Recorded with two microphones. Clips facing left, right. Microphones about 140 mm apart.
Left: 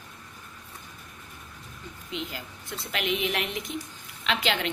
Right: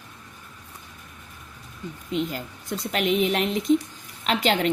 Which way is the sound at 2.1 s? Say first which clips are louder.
Right 8 dB; 45° right (ahead or behind).